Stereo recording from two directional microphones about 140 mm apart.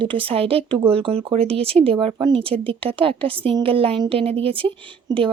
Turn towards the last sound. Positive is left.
turn(degrees=-30)  # may be behind; listen again after turning